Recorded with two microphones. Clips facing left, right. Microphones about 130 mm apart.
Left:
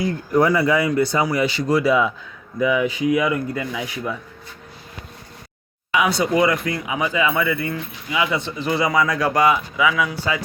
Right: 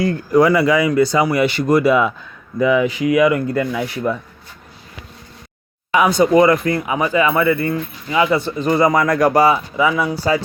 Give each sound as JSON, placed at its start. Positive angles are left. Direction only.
{"t": 0.0, "sound": "speech", "side_deg": -90}
{"t": 5.9, "sound": "speech", "side_deg": -45}
{"t": 9.3, "sound": "speech", "side_deg": -35}